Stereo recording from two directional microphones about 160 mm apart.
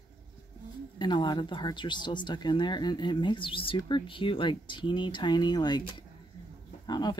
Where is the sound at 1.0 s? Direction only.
30° left (ahead or behind).